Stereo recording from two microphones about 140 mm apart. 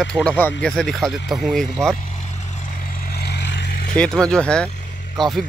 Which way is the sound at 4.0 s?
5° left (ahead or behind).